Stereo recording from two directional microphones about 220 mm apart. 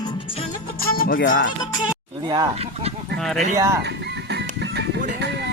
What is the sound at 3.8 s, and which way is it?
Music, 50° right (ahead or behind).